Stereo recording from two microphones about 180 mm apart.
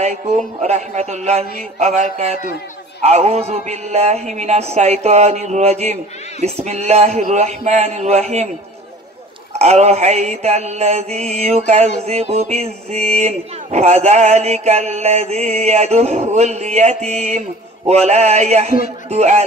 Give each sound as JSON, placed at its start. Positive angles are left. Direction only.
{"t": 0.0, "sound": "speech", "side_deg": -40}
{"t": 9.5, "sound": "speech", "side_deg": -35}